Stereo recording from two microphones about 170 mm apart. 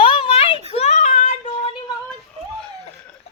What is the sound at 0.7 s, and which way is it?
Child singing, 40° left (ahead or behind).